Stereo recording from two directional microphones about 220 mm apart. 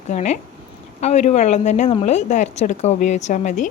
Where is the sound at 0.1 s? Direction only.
35° left (ahead or behind).